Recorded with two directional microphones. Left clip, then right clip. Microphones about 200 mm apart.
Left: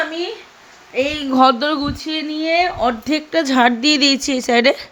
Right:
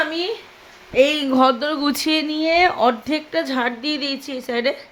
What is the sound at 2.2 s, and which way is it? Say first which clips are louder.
Speech: left 1 dB; 15° right (ahead or behind).